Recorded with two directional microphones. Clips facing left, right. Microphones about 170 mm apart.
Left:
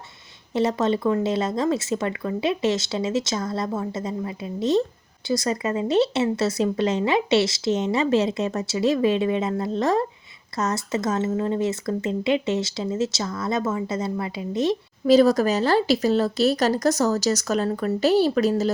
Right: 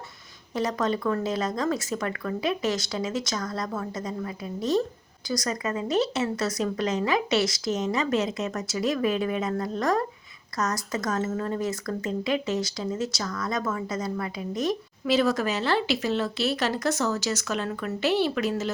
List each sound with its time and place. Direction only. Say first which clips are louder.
0.5 s speech: left 5 dB; 25° left (ahead or behind)
15.0 s speech: left 7 dB; 40° left (ahead or behind)